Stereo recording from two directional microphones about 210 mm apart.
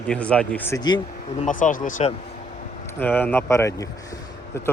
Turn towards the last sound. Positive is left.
turn(degrees=15)  # may be behind; listen again after turning